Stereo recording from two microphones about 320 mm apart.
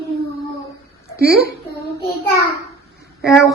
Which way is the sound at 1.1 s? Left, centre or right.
Right.